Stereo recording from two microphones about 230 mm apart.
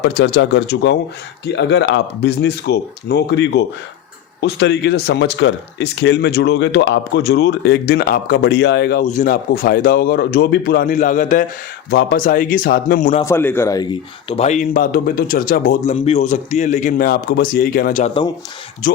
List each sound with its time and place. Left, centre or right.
0.0 s speech: left
13.2 s speech: centre; by 18.3 s left